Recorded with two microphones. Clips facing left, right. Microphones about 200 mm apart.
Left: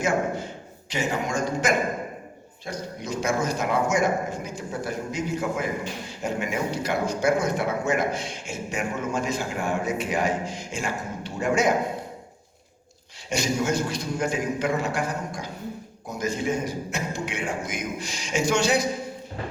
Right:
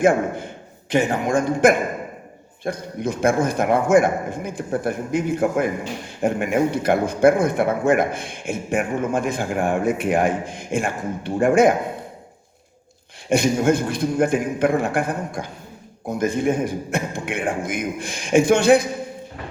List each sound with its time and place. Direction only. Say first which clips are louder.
0.0 s a man's voice: right 7 dB; 55° right (ahead or behind)
13.3 s a man's voice: right 7 dB; 55° right (ahead or behind)